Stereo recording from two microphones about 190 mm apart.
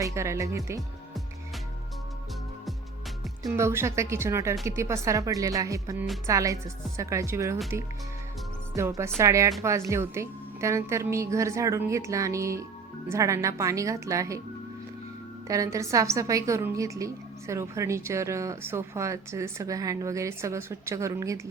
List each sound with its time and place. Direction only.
0.0 s a woman's voice: 15° right (ahead or behind)
3.4 s a woman's voice: 15° right (ahead or behind)
8.7 s a woman's voice: 15° right (ahead or behind)
15.4 s a woman's voice: 15° right (ahead or behind)